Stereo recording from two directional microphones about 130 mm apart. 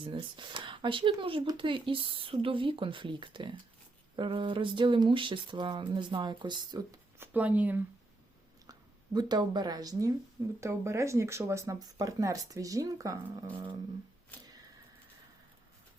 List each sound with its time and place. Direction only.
0.0 s speech: 40° right (ahead or behind)
7.2 s speech: 10° right (ahead or behind)
9.1 s speech: 35° right (ahead or behind)
13.5 s speech: 40° right (ahead or behind)